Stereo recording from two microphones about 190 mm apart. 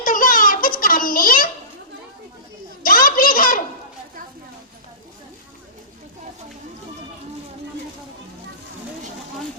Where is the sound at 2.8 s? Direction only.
50° left (ahead or behind).